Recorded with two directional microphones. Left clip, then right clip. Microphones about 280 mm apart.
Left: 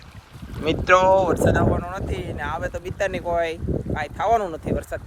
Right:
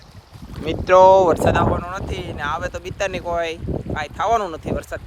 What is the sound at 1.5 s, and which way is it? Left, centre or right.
Speech, centre.